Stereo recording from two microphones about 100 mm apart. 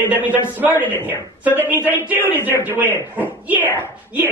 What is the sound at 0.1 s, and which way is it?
Speech, 15° right (ahead or behind).